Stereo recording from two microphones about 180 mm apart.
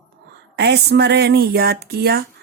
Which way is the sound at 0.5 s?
70° right (ahead or behind).